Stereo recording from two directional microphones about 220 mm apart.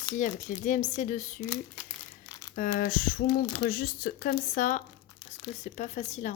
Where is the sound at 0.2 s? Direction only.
35° left (ahead or behind).